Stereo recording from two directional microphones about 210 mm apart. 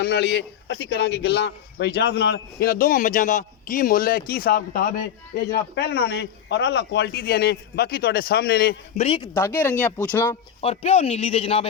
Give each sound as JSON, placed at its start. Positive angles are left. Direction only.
{"t": 0.0, "sound": "speech", "side_deg": 50}
{"t": 9.0, "sound": "a man's voice", "side_deg": 25}
{"t": 9.3, "sound": "speech", "side_deg": 10}
{"t": 10.2, "sound": "a man's voice", "side_deg": 30}